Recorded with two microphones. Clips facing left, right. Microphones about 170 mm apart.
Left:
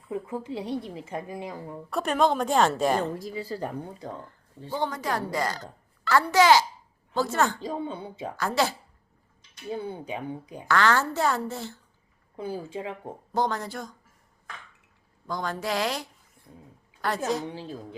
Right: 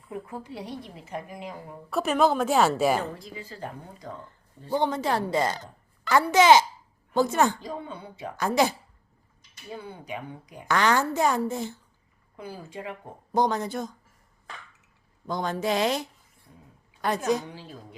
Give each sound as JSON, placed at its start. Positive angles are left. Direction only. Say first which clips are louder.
{"t": 0.1, "sound": "a woman's voice", "louder": "left 5 dB", "side_deg": 20}
{"t": 1.9, "sound": "a woman's voice", "louder": "right 1 dB", "side_deg": -5}
{"t": 3.3, "sound": "speech", "louder": "left 8 dB", "side_deg": 35}
{"t": 4.3, "sound": "a woman's voice", "louder": "right 5 dB", "side_deg": -20}
{"t": 7.6, "sound": "a woman's voice", "louder": "left 4 dB", "side_deg": 25}
{"t": 8.4, "sound": "a woman's voice", "louder": "right 3 dB", "side_deg": -20}
{"t": 9.7, "sound": "a woman's voice", "louder": "left 4 dB", "side_deg": 30}
{"t": 10.7, "sound": "a woman's voice", "louder": "even", "side_deg": -15}
{"t": 12.4, "sound": "a woman's voice", "louder": "left 5 dB", "side_deg": 25}
{"t": 13.3, "sound": "speech", "louder": "right 3 dB", "side_deg": -20}
{"t": 15.3, "sound": "speech", "louder": "right 3 dB", "side_deg": -20}